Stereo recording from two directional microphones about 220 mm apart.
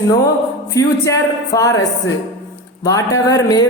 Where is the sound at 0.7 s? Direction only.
15° left (ahead or behind).